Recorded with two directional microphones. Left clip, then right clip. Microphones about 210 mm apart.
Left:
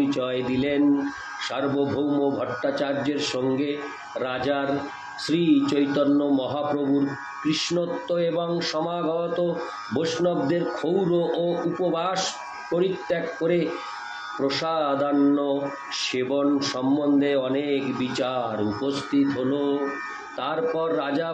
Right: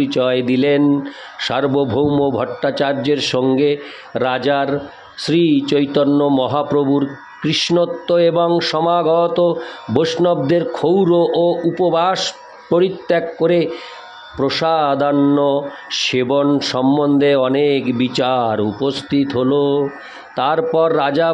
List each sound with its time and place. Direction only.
0.1 s a man's voice: 55° right (ahead or behind)